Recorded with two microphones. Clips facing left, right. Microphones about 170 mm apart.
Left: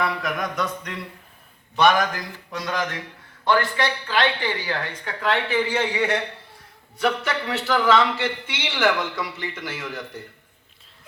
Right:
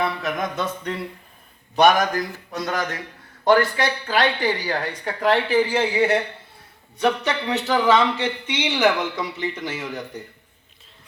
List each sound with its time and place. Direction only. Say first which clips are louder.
0.2 s a man's voice: right 1 dB; 25° right (ahead or behind)
1.7 s a woman's voice: right 2 dB; 45° right (ahead or behind); by 10.2 s 20° right (ahead or behind)